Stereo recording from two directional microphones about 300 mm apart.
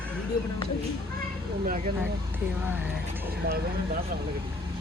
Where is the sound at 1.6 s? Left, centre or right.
Right.